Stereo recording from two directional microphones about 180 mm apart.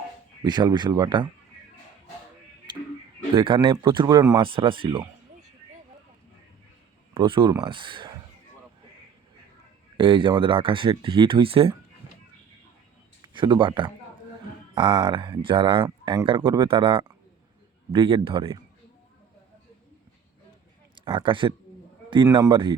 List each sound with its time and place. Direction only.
0.4 s speech: 25° right (ahead or behind)
2.7 s tick-tock: 25° right (ahead or behind)
3.3 s speech: 30° right (ahead or behind)
7.1 s speech: 30° right (ahead or behind)
10.0 s speech: 25° right (ahead or behind)
13.2 s speech: 25° right (ahead or behind)
21.1 s speech: 25° right (ahead or behind)